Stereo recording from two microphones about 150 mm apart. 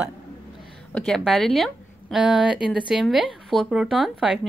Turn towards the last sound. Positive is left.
turn(degrees=0)  # may be behind; listen again after turning